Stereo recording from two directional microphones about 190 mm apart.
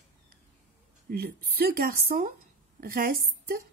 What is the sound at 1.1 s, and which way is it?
A woman's voice, 55° right (ahead or behind).